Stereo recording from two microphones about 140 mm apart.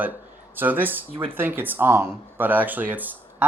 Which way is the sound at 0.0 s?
15° right (ahead or behind).